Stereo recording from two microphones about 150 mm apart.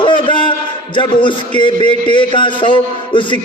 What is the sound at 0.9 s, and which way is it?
A man's voice, 30° left (ahead or behind).